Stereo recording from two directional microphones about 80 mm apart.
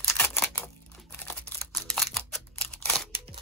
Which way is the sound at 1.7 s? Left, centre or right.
Centre.